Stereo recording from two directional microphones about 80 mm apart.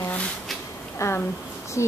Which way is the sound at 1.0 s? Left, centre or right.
Left.